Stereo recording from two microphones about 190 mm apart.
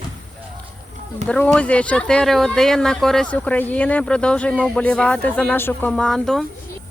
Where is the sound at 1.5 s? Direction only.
5° left (ahead or behind).